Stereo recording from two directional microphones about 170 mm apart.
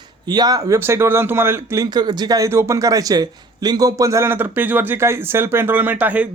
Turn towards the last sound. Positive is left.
turn(degrees=-10)  # may be behind; listen again after turning